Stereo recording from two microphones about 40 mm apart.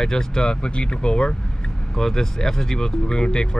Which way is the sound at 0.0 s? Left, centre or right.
Centre.